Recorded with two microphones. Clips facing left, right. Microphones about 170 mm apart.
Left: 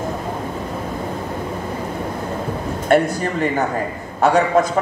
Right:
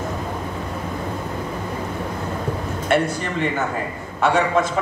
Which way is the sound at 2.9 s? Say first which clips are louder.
Left 4 dB; 40° left (ahead or behind).